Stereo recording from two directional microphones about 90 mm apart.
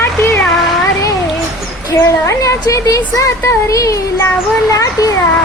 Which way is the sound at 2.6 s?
40° left (ahead or behind).